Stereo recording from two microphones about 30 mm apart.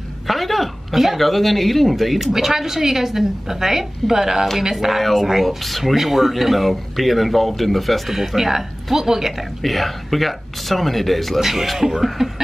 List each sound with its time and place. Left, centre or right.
0.3 s speech: centre
5.9 s speech: centre
8.4 s speech: centre
9.6 s speech: centre
11.4 s speech: centre